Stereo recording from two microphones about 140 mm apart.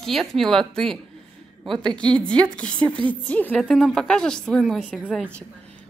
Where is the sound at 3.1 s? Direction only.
10° left (ahead or behind).